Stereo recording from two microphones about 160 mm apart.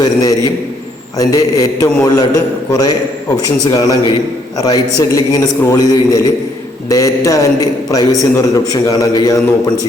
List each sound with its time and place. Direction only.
0.0 s a man's voice: 25° left (ahead or behind)